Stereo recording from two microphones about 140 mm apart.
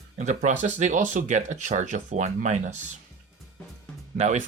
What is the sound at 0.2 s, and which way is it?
Speech, 60° right (ahead or behind).